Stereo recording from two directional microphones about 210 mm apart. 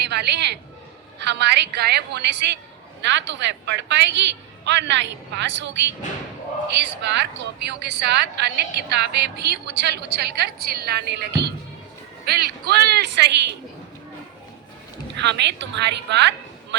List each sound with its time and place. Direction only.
0.0 s a woman's voice: 55° right (ahead or behind)
6.7 s a woman's voice: 55° right (ahead or behind)
15.2 s a woman's voice: 55° right (ahead or behind)